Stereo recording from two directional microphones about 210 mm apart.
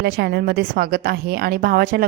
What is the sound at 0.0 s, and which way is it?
A woman's voice, 50° right (ahead or behind).